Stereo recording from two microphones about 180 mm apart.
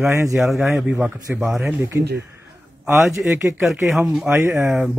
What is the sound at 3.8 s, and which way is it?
Speech, centre (ahead or behind).